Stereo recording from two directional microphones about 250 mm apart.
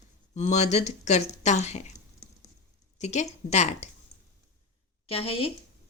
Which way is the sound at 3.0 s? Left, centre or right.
Left.